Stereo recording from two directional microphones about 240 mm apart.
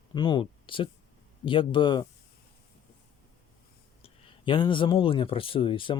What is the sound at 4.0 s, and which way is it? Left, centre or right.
Speech, centre.